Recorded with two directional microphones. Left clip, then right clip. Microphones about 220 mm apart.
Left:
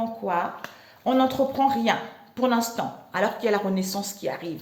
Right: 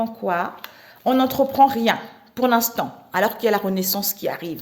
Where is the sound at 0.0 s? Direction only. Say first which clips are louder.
Right 3 dB; 55° right (ahead or behind).